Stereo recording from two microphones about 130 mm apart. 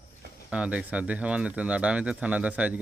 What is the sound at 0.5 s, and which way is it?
Speech, 10° right (ahead or behind).